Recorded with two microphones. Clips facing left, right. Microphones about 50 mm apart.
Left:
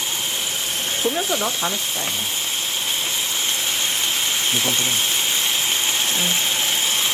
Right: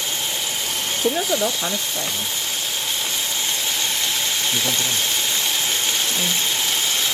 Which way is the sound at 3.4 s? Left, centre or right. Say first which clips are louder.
Left 1 dB; left.